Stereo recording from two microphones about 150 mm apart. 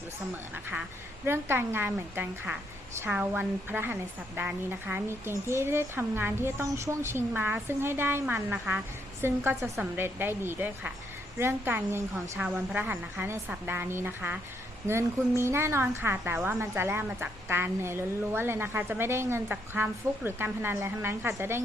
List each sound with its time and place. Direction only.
0.5 s a woman's voice: 10° right (ahead or behind)
9.2 s a woman's voice: 15° right (ahead or behind)
15.4 s a woman's voice: 20° right (ahead or behind)